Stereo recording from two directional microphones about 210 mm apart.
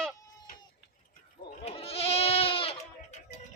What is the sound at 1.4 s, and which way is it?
Goat, 30° left (ahead or behind).